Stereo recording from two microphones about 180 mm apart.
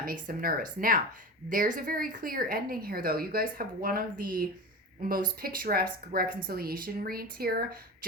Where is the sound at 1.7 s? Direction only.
50° right (ahead or behind).